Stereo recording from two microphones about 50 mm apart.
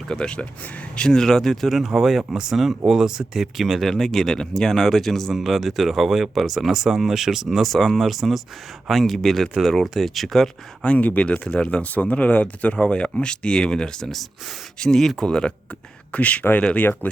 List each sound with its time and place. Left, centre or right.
0.1 s speech: centre
1.8 s speech: centre
3.8 s speech: centre
10.8 s speech: left
16.1 s speech: left
17.0 s speech: left